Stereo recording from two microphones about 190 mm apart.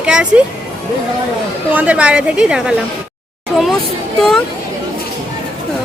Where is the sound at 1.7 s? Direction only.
5° right (ahead or behind).